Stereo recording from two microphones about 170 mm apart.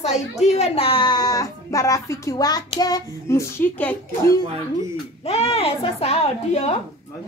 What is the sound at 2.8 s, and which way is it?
Child singing, 20° left (ahead or behind).